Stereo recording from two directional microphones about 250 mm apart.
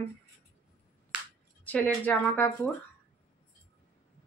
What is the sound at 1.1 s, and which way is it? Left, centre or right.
Finger snapping, centre.